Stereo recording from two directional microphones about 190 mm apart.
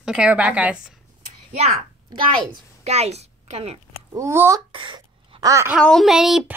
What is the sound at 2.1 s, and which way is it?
A woman's voice, 30° right (ahead or behind).